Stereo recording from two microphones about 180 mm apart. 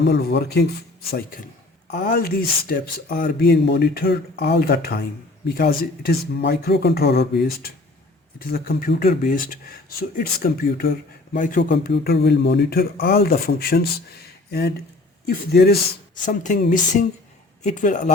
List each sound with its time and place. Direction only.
0.0 s speech: 65° left (ahead or behind)
1.1 s speech: 50° left (ahead or behind)
11.3 s speech: 45° left (ahead or behind)
11.7 s speech: 60° left (ahead or behind)
15.3 s speech: 60° left (ahead or behind)
16.2 s speech: 45° left (ahead or behind)